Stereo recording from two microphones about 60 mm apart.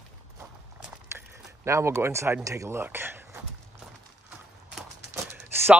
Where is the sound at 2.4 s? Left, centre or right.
Right.